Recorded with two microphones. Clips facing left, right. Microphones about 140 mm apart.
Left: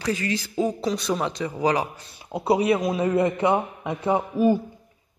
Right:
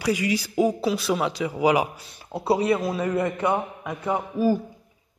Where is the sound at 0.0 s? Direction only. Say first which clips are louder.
Right 2 dB; 10° right (ahead or behind).